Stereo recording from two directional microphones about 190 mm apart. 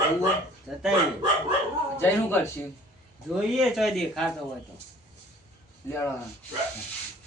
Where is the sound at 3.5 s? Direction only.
Centre (ahead or behind).